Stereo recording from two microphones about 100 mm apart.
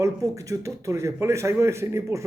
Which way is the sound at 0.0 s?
35° right (ahead or behind).